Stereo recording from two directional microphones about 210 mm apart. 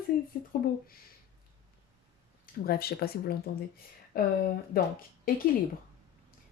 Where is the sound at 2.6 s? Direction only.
45° left (ahead or behind).